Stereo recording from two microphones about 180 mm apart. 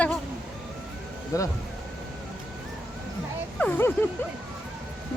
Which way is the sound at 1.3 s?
20° left (ahead or behind).